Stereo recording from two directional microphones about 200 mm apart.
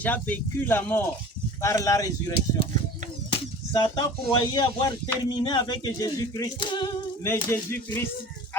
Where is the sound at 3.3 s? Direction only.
25° left (ahead or behind).